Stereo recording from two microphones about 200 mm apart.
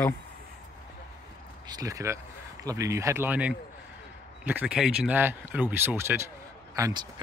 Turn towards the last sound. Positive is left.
turn(degrees=-15)  # may be behind; listen again after turning